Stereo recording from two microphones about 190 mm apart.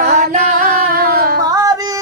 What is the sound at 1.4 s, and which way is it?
Yodeling, 20° right (ahead or behind).